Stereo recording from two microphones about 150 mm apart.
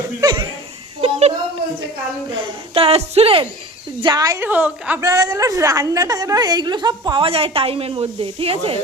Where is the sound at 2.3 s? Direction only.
35° right (ahead or behind).